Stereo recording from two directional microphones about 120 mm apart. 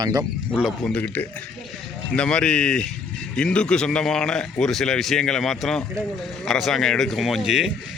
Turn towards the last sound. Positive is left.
turn(degrees=-5)  # may be behind; listen again after turning